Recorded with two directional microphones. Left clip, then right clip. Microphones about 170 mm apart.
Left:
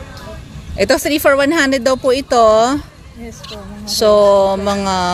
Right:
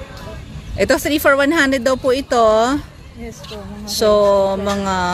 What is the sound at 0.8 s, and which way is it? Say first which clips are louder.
Speech: left 2 dB; centre (ahead or behind).